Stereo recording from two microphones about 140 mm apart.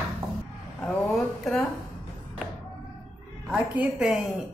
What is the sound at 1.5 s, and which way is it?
Speech, 5° left (ahead or behind).